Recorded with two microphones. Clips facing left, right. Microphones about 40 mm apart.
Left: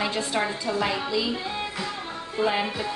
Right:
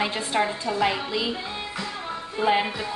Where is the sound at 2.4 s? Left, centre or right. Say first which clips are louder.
Right 4 dB; centre.